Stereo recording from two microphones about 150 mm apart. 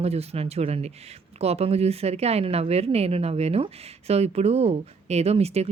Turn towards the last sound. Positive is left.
turn(degrees=-45)  # may be behind; listen again after turning